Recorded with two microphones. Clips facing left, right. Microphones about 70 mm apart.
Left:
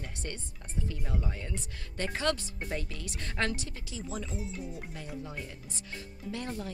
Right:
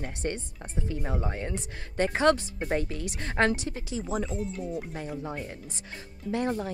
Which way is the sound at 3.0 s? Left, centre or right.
Right.